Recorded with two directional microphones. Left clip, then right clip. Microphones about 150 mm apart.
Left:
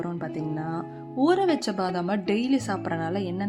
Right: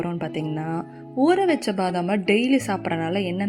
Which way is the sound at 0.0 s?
20° right (ahead or behind).